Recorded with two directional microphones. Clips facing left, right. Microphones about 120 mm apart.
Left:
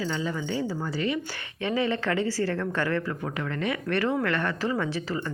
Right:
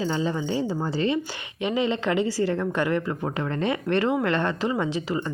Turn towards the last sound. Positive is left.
turn(degrees=-20)  # may be behind; listen again after turning